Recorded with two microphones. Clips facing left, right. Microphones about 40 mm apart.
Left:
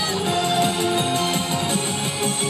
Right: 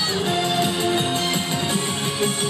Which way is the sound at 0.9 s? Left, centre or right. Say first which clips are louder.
Left 1 dB; right.